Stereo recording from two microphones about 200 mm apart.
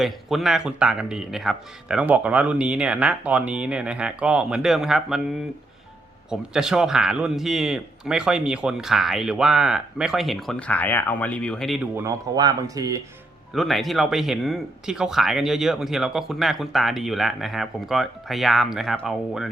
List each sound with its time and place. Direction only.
0.0 s speech: centre (ahead or behind)
6.3 s speech: 5° right (ahead or behind)
11.9 s speech: 15° right (ahead or behind)
13.5 s speech: centre (ahead or behind)